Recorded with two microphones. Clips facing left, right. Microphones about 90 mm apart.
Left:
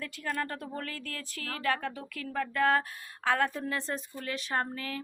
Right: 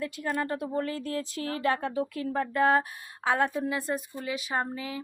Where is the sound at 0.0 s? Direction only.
20° right (ahead or behind).